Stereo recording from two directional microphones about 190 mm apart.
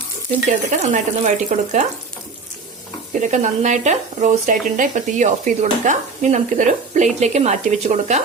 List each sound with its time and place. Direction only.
0.8 s speech: 40° right (ahead or behind)
3.1 s speech: 40° right (ahead or behind)